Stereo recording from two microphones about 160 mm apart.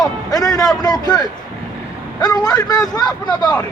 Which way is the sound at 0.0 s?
25° left (ahead or behind).